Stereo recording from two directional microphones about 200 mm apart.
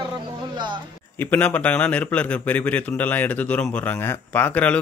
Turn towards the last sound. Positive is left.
turn(degrees=10)  # may be behind; listen again after turning